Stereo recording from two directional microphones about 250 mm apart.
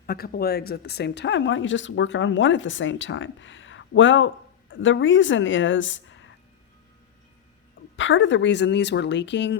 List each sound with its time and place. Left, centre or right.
0.0 s speech: left
7.9 s speech: left